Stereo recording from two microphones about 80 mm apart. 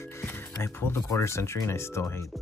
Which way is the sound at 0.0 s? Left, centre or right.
Left.